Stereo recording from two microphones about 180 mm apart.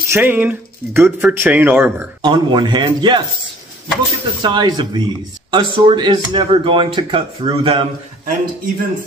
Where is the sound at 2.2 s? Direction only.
25° right (ahead or behind).